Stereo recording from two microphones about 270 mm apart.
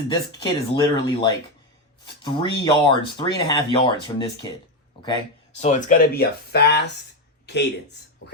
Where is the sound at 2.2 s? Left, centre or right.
Centre.